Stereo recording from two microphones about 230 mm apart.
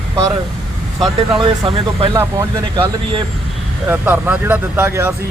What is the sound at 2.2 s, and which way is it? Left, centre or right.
Speech, centre.